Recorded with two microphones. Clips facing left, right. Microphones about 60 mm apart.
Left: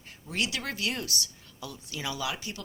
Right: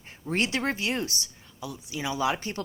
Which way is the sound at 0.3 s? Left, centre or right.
Right.